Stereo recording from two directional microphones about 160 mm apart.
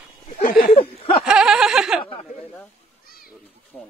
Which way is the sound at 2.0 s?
35° left (ahead or behind).